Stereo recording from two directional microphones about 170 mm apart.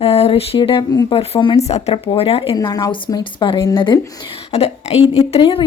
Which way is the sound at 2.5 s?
20° left (ahead or behind).